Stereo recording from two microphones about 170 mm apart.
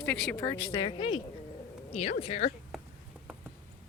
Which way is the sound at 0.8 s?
30° left (ahead or behind).